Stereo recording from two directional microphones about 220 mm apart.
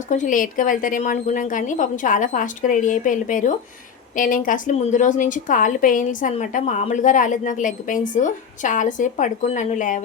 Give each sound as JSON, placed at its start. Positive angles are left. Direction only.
{"t": 0.1, "sound": "a woman's voice", "side_deg": 35}